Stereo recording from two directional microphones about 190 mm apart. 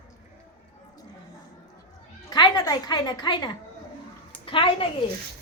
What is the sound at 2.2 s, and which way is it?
A woman's voice, 20° left (ahead or behind).